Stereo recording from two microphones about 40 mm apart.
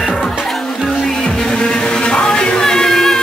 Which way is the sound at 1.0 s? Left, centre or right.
Centre.